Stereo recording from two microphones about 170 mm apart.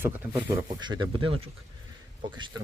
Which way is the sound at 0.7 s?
25° right (ahead or behind).